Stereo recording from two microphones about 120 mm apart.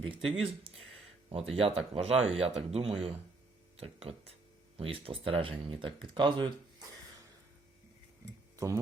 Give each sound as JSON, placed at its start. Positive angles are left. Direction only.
{"t": 0.1, "sound": "speech", "side_deg": -50}
{"t": 8.5, "sound": "speech", "side_deg": -25}